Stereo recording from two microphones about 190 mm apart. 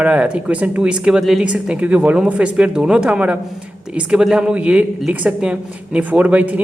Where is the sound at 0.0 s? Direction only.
5° right (ahead or behind).